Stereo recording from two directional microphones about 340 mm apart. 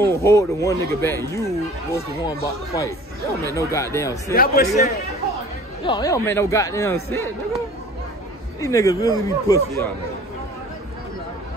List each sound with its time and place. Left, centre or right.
0.0 s speech: centre
4.3 s speech: left
5.9 s speech: centre
8.5 s speech: centre